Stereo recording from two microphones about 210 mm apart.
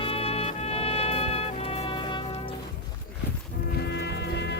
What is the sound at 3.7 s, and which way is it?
Music, 55° left (ahead or behind).